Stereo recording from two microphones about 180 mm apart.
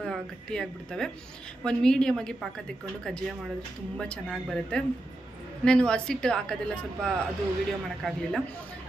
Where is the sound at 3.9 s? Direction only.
5° left (ahead or behind).